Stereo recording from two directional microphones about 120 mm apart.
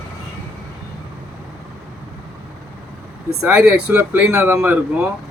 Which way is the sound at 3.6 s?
5° right (ahead or behind).